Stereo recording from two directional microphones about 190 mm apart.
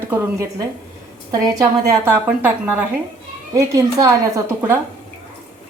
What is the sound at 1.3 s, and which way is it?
A woman's voice, 20° right (ahead or behind).